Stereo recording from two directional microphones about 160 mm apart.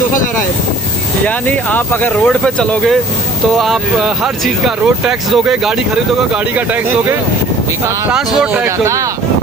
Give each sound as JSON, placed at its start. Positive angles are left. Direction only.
{"t": 1.2, "sound": "speech", "side_deg": 10}
{"t": 8.5, "sound": "speech", "side_deg": -15}